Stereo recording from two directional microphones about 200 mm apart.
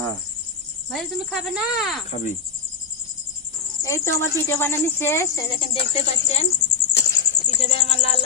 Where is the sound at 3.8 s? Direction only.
15° left (ahead or behind).